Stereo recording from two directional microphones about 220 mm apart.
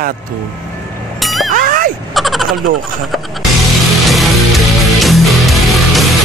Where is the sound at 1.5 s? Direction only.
40° right (ahead or behind).